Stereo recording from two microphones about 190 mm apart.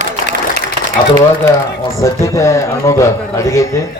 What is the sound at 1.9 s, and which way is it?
A man's voice, 15° left (ahead or behind).